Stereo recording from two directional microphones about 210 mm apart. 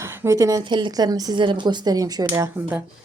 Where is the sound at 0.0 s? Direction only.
10° right (ahead or behind).